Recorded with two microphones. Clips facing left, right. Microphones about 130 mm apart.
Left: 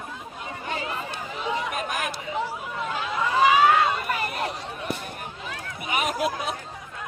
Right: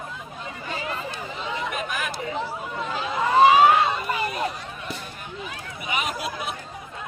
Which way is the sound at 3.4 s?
30° right (ahead or behind).